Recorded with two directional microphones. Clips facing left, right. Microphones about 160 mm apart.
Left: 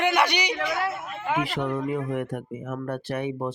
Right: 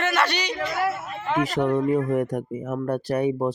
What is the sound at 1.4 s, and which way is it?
Speech, 40° right (ahead or behind).